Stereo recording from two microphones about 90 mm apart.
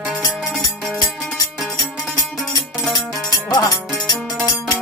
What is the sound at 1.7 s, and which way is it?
Music, 45° left (ahead or behind).